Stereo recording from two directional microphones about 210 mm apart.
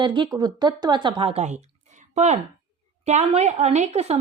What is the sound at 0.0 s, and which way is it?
Speech, 20° right (ahead or behind).